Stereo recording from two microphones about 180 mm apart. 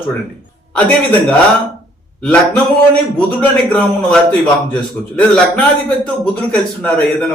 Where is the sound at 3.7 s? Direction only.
5° left (ahead or behind).